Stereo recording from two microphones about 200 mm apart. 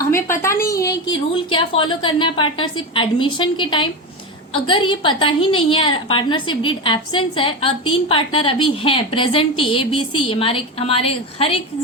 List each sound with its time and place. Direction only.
0.4 s a woman's voice: 15° left (ahead or behind)